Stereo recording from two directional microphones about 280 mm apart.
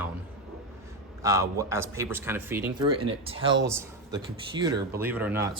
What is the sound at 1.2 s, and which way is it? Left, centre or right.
Speech, centre.